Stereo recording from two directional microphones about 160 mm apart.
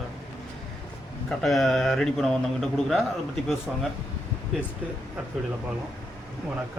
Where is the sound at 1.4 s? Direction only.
Centre (ahead or behind).